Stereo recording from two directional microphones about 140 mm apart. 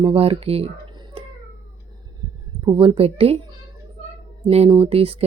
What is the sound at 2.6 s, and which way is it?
Speech, 40° right (ahead or behind).